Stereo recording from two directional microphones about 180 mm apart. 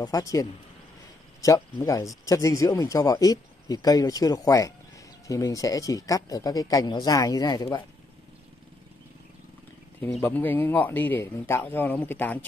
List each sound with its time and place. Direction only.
0.0 s speech: 20° left (ahead or behind)
10.2 s speech: 10° left (ahead or behind)